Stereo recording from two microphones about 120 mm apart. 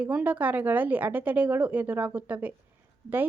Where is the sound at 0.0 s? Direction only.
10° right (ahead or behind).